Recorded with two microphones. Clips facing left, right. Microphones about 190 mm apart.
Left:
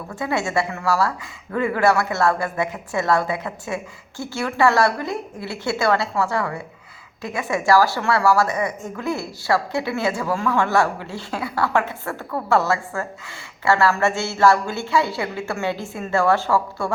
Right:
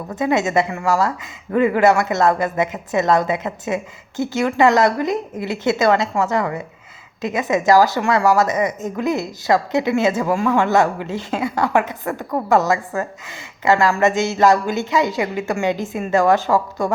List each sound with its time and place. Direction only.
0.1 s a woman's voice: 20° right (ahead or behind)